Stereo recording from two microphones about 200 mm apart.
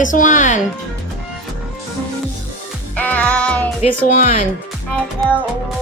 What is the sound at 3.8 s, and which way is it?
Speech, 35° left (ahead or behind).